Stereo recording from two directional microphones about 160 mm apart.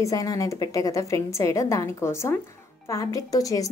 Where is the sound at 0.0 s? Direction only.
20° left (ahead or behind).